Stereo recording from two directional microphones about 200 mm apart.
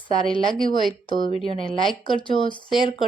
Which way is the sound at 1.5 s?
25° left (ahead or behind).